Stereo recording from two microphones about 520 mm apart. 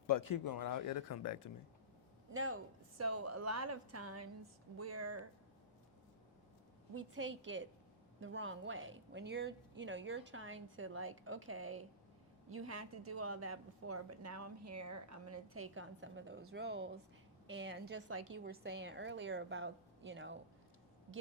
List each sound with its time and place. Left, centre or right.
0.1 s speech: left
2.3 s a woman's voice: right
6.9 s a woman's voice: right